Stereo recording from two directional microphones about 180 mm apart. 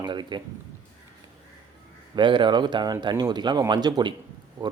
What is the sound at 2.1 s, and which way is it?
Speech, 25° right (ahead or behind).